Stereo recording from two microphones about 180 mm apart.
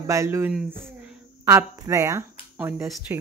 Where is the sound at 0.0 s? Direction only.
15° right (ahead or behind).